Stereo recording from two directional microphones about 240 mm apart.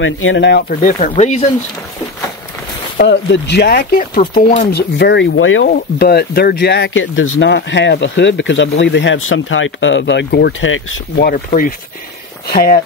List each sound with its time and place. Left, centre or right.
0.0 s speech: left
3.0 s speech: left
5.7 s speech: left
11.2 s speech: left